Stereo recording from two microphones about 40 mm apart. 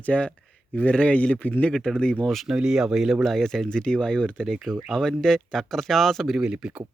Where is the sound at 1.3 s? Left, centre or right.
Left.